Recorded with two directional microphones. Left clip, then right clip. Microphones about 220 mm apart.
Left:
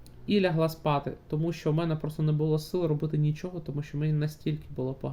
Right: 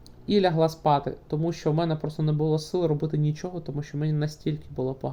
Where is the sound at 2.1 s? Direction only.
5° left (ahead or behind).